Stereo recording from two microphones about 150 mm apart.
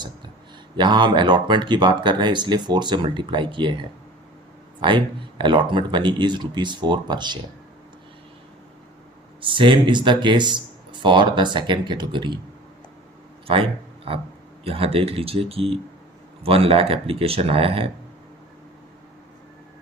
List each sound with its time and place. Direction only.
0.8 s speech: 30° right (ahead or behind)
9.4 s speech: 35° right (ahead or behind)
13.5 s speech: 40° right (ahead or behind)